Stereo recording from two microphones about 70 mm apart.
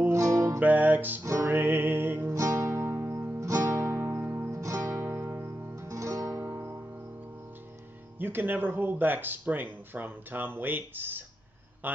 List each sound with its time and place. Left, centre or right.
0.1 s music: right
0.6 s music: right
1.2 s music: right
1.5 s music: right
2.3 s music: right
5.0 s music: right
8.2 s a man's voice: right